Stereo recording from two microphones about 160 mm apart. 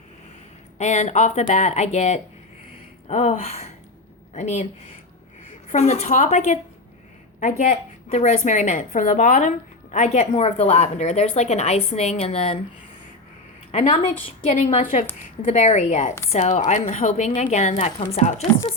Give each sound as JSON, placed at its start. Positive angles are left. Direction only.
{"t": 0.8, "sound": "a woman's voice", "side_deg": 45}
{"t": 5.7, "sound": "a woman's voice", "side_deg": 45}
{"t": 13.7, "sound": "a woman's voice", "side_deg": 45}